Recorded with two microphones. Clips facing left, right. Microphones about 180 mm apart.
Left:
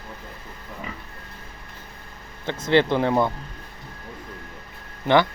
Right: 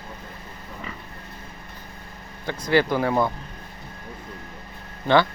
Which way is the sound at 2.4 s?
25° left (ahead or behind).